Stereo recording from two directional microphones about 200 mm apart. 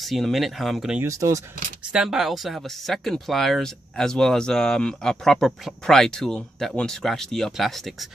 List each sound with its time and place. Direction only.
0.0 s speech: centre (ahead or behind)
1.0 s speech: 15° right (ahead or behind)
1.9 s speech: 5° right (ahead or behind)